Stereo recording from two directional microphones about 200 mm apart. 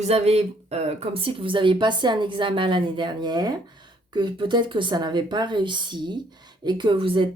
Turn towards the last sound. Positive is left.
turn(degrees=-25)  # may be behind; listen again after turning